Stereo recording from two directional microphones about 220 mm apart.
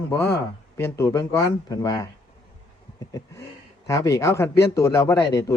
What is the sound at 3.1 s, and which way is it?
Speech, 15° left (ahead or behind).